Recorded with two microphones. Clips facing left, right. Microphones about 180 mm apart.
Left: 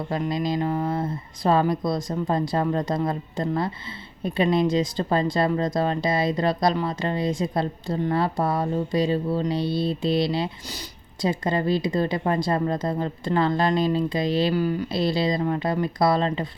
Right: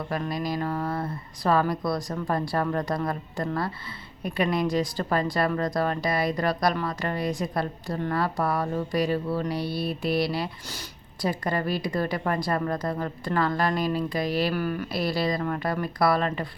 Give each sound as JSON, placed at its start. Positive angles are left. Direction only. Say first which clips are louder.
{"t": 0.1, "sound": "speech", "louder": "left 4 dB", "side_deg": 20}